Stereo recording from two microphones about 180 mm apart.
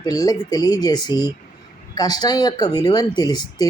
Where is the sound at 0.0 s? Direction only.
20° left (ahead or behind).